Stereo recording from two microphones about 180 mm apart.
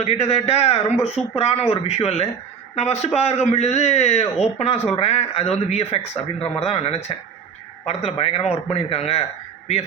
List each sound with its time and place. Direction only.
0.0 s a man's voice: 35° left (ahead or behind)